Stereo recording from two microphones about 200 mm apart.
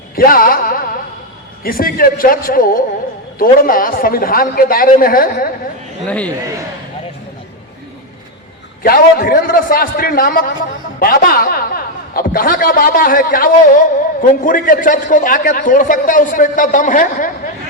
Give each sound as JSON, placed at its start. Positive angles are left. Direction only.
{"t": 0.3, "sound": "a sound", "side_deg": 45}
{"t": 1.6, "sound": "a man's voice", "side_deg": 45}
{"t": 6.1, "sound": "a man's voice", "side_deg": 5}
{"t": 8.8, "sound": "a man's voice", "side_deg": 45}